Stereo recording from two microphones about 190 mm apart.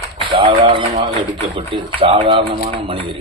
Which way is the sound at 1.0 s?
25° right (ahead or behind).